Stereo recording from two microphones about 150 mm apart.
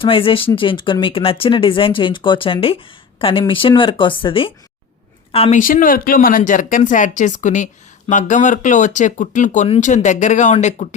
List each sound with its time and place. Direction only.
0.0 s a woman's voice: 35° left (ahead or behind)
5.5 s speech: 65° left (ahead or behind)